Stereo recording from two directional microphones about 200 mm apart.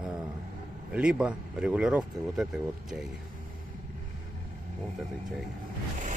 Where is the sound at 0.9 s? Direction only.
5° right (ahead or behind).